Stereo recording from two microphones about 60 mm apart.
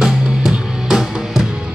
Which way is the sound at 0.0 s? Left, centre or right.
Centre.